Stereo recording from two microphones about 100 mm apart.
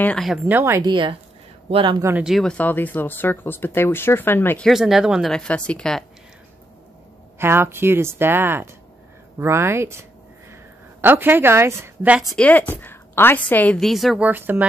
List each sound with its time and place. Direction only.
0.5 s a woman's voice: 25° right (ahead or behind)
0.8 s a woman's voice: 55° right (ahead or behind)
2.3 s speech: 10° left (ahead or behind)
4.7 s speech: 5° right (ahead or behind)
5.3 s a woman's voice: 10° left (ahead or behind)
7.3 s a woman's voice: 25° right (ahead or behind)
12.4 s a woman's voice: 15° left (ahead or behind)
13.7 s speech: centre (ahead or behind)
14.2 s a woman's voice: 20° right (ahead or behind)